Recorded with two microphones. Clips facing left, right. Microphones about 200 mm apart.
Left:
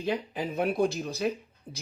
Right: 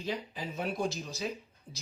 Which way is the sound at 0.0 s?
60° left (ahead or behind).